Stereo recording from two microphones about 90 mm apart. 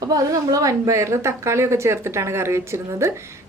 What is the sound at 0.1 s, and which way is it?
A woman's voice, 40° right (ahead or behind).